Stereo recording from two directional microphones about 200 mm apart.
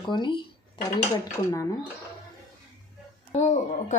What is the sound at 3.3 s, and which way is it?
Speech, 35° left (ahead or behind).